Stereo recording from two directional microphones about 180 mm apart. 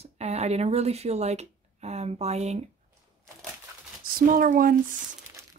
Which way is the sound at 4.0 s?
50° right (ahead or behind).